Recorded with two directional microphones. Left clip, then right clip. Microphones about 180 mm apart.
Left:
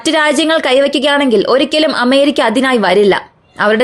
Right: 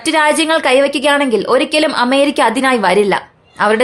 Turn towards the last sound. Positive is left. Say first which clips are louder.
# left 2 dB
turn(degrees=30)  # may be behind; listen again after turning